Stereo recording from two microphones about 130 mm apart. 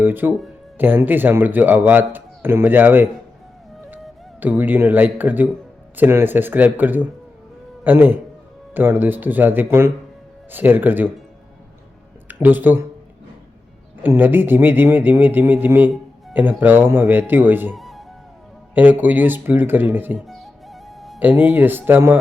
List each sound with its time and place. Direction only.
0.0 s speech: 15° right (ahead or behind)
4.4 s speech: 15° right (ahead or behind)
12.3 s speech: 15° right (ahead or behind)
14.0 s speech: 15° right (ahead or behind)
17.7 s music: centre (ahead or behind)
18.7 s speech: 15° right (ahead or behind)
20.1 s music: centre (ahead or behind)
21.2 s speech: 10° right (ahead or behind)